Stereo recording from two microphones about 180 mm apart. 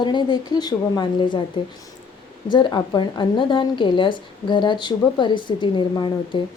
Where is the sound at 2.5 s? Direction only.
25° left (ahead or behind).